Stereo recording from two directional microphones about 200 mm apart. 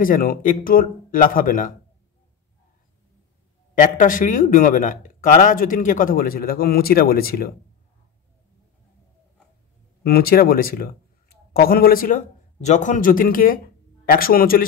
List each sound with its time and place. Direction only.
0.0 s speech: 45° left (ahead or behind)
3.7 s speech: 40° left (ahead or behind)
10.0 s speech: 50° left (ahead or behind)